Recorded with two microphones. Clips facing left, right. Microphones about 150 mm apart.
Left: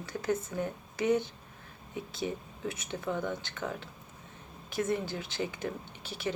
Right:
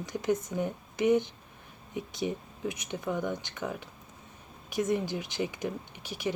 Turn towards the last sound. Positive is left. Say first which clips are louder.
# right 2 dB
turn(degrees=-15)  # may be behind; listen again after turning